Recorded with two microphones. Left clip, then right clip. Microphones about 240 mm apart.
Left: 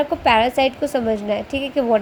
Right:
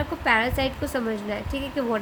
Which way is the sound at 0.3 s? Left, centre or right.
Centre.